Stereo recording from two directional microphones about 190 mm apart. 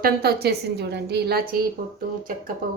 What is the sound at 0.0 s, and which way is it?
A woman's voice, 55° right (ahead or behind).